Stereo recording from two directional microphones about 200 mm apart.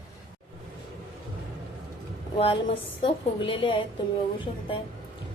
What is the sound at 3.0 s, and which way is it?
Speech, 25° left (ahead or behind).